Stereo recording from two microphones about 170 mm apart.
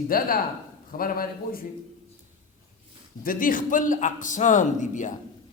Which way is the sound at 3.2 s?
55° left (ahead or behind).